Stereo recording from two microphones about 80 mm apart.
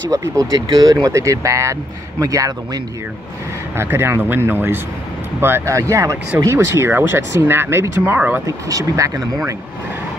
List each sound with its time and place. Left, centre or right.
0.1 s speech: right
3.7 s speech: right
5.8 s speech: right
8.5 s speech: right